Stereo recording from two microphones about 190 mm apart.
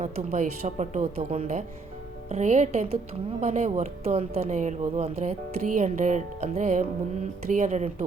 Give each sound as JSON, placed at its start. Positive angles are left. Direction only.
{"t": 0.0, "sound": "speech", "side_deg": -40}